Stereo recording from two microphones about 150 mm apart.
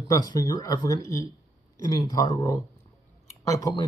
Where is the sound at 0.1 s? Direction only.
25° left (ahead or behind).